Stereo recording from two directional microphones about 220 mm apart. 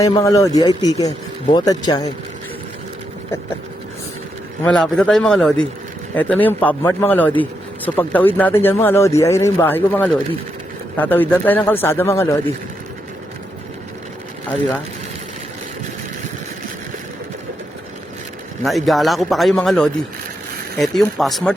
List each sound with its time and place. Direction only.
0.0 s speech: 15° left (ahead or behind)
4.6 s a man's voice: 5° left (ahead or behind)
18.6 s a man's voice: centre (ahead or behind)